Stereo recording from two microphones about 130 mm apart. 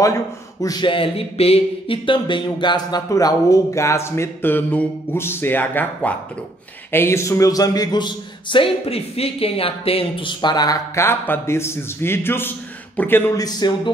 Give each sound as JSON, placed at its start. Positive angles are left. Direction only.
{"t": 0.0, "sound": "a man's voice", "side_deg": 25}
{"t": 13.4, "sound": "speech", "side_deg": 35}